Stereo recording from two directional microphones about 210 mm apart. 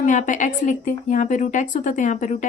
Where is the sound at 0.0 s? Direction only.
35° left (ahead or behind).